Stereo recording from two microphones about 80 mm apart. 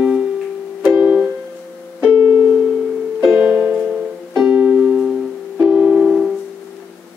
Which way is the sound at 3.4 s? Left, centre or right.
Centre.